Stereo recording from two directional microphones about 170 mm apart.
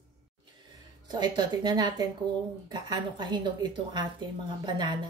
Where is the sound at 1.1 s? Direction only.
25° right (ahead or behind).